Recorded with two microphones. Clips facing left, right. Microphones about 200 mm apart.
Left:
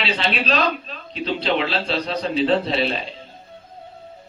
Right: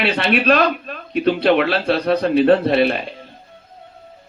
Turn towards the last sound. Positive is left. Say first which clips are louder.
# right 6 dB
turn(degrees=-60)  # may be behind; listen again after turning